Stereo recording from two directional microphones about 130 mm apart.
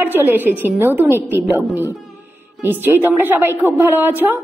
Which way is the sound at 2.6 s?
15° right (ahead or behind).